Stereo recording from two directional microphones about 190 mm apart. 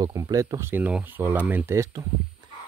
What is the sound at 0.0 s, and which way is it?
Speech, 15° right (ahead or behind).